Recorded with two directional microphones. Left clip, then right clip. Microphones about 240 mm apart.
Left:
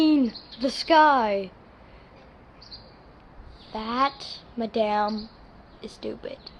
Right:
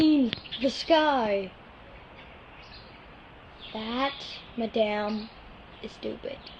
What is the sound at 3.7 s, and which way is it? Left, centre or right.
Speech, centre.